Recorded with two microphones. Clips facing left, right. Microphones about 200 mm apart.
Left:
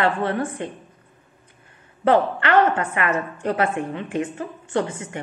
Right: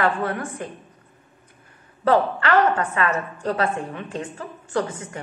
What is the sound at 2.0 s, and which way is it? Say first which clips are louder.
A woman's voice: left 1 dB; 25° left (ahead or behind).